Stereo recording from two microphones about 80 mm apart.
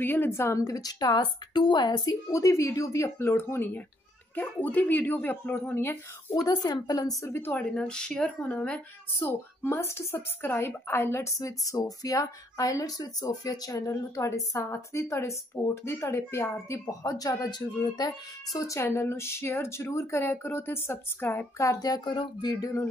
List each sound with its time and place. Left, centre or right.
0.0 s a woman's voice: left
2.3 s speech: left
6.4 s speech: left
7.2 s speech: left
7.5 s speech: centre; by 18.8 s left
18.8 s speech: left
21.5 s speech: left